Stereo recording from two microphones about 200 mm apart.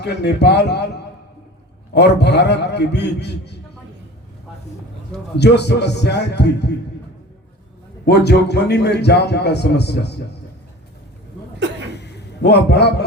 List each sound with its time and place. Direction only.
0.0 s a man's voice: 55° left (ahead or behind)
5.4 s a man's voice: 60° left (ahead or behind)
8.0 s a man's voice: 55° left (ahead or behind)
11.9 s a sound: 55° left (ahead or behind)